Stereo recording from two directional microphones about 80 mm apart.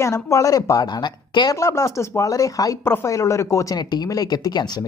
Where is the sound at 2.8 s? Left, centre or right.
Left.